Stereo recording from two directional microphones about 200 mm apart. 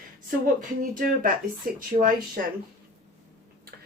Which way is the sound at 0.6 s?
45° right (ahead or behind).